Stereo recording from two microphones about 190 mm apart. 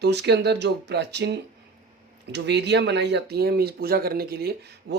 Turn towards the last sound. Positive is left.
turn(degrees=-55)  # may be behind; listen again after turning